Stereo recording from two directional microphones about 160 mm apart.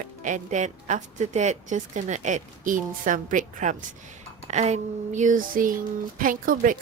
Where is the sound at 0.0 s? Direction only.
50° right (ahead or behind).